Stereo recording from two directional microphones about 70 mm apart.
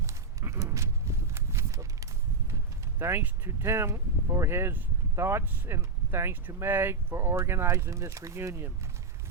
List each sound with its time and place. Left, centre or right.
0.0 s walk: right
3.0 s speech: right